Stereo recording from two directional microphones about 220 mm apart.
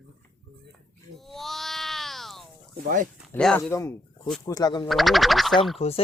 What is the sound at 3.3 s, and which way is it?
Speech, 5° left (ahead or behind).